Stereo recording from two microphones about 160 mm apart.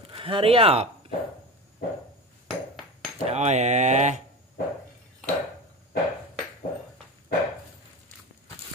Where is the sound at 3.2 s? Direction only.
45° right (ahead or behind).